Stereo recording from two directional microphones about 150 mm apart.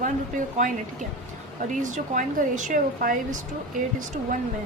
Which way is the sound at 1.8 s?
55° right (ahead or behind).